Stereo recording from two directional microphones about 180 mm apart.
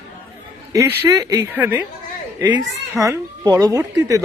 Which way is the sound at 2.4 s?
25° right (ahead or behind).